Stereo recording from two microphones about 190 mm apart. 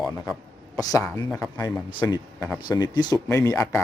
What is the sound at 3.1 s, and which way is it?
Speech, 15° left (ahead or behind).